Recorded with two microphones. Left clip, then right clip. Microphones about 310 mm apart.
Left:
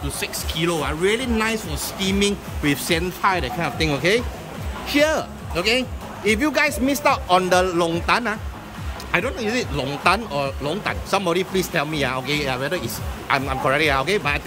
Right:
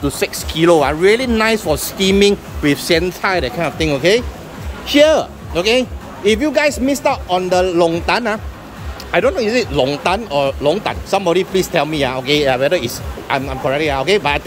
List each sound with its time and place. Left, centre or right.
0.0 s speech: centre